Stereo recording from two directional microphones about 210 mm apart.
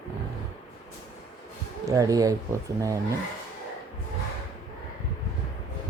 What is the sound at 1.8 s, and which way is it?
Speech, 15° right (ahead or behind).